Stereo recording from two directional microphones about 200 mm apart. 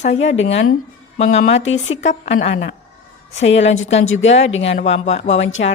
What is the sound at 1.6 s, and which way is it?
Speech, 75° left (ahead or behind).